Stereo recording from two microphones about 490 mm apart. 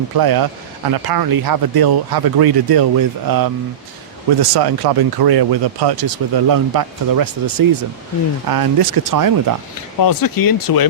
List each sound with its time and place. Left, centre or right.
0.2 s speech: right
10.0 s speech: left